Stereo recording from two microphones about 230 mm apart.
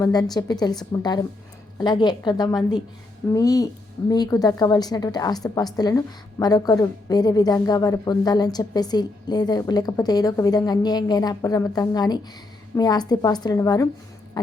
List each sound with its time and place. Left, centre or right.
0.0 s a woman's voice: centre
1.8 s a woman's voice: centre
14.4 s a sound: centre